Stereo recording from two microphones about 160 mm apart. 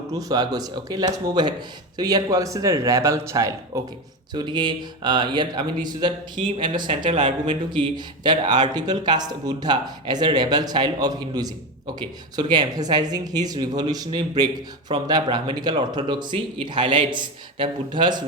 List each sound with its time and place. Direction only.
0.1 s speech: 25° right (ahead or behind)